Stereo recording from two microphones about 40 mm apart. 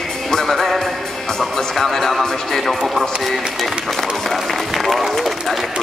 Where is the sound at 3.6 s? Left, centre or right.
Centre.